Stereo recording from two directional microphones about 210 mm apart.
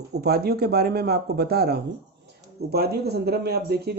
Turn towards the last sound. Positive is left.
turn(degrees=-50)  # may be behind; listen again after turning